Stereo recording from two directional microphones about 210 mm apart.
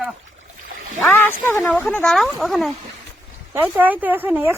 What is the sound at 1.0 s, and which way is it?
Speech, 10° left (ahead or behind).